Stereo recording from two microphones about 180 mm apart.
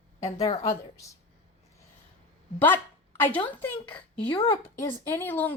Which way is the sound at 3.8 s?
30° left (ahead or behind).